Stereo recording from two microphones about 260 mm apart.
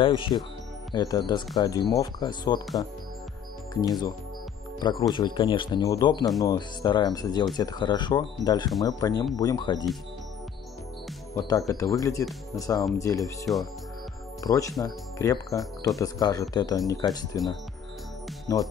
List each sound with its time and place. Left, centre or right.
0.0 s speech: centre
3.8 s speech: centre
11.3 s speech: centre
13.5 s speech: centre
14.4 s speech: centre
18.5 s speech: centre